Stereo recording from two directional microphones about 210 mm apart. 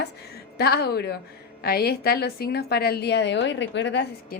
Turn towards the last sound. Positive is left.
turn(degrees=55)  # may be behind; listen again after turning